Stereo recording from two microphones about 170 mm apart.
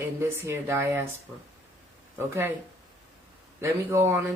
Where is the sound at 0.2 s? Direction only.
15° right (ahead or behind).